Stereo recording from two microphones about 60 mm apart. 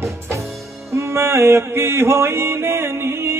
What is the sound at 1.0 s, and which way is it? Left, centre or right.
Mantra, right.